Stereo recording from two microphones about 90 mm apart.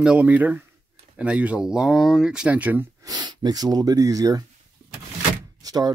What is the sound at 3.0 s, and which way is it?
Speech, 55° right (ahead or behind).